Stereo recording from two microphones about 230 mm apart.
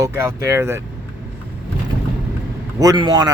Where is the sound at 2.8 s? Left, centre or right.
Centre.